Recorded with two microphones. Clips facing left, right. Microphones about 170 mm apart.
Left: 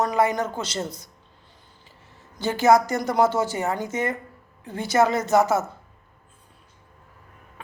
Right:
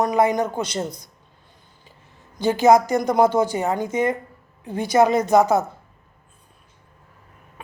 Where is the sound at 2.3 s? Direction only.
15° right (ahead or behind).